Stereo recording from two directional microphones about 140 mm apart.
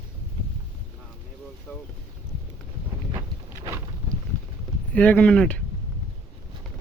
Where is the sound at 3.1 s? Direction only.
20° right (ahead or behind).